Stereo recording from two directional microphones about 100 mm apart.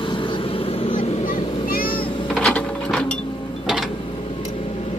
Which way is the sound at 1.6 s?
60° left (ahead or behind).